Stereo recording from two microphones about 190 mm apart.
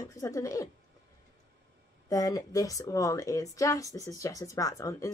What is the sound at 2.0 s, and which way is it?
Speech, 20° left (ahead or behind).